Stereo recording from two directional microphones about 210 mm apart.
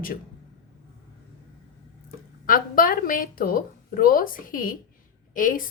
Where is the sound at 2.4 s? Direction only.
40° left (ahead or behind).